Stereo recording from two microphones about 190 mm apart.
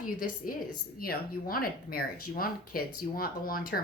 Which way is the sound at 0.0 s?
45° left (ahead or behind).